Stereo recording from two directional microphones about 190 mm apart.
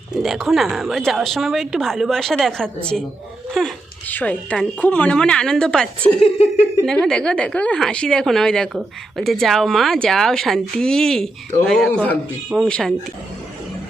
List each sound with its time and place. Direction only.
0.2 s a woman's voice: centre (ahead or behind)
6.1 s speech: 30° left (ahead or behind)
6.8 s a woman's voice: 5° left (ahead or behind)